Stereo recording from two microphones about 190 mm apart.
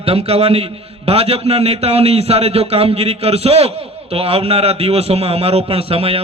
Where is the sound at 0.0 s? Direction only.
30° right (ahead or behind).